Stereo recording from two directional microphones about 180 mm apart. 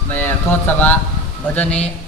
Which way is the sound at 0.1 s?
10° left (ahead or behind).